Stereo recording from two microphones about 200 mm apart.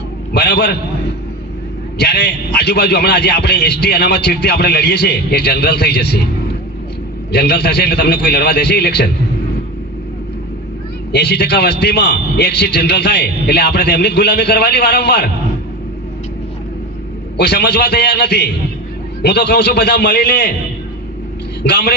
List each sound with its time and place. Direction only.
0.3 s a man's voice: 55° left (ahead or behind)
2.0 s a man's voice: 55° left (ahead or behind)
7.3 s a man's voice: 55° left (ahead or behind)
11.1 s a man's voice: 55° left (ahead or behind)
17.3 s a man's voice: 55° left (ahead or behind)
21.6 s a man's voice: 55° left (ahead or behind)